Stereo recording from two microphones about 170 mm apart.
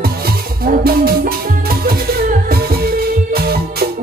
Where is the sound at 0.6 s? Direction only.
60° right (ahead or behind).